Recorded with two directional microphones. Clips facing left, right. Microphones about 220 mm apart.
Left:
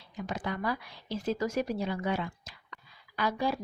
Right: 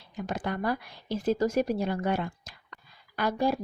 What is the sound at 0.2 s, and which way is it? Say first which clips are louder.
Speech: right 3 dB; 50° right (ahead or behind).